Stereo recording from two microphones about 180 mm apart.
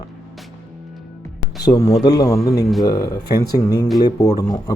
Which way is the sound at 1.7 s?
15° left (ahead or behind).